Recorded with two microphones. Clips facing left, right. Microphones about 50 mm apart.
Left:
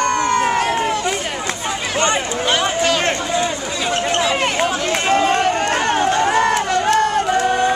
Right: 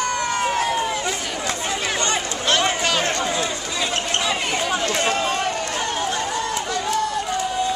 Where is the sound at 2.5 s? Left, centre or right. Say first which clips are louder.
Left 2 dB; centre.